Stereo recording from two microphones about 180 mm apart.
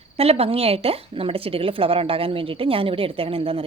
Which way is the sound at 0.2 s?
35° right (ahead or behind).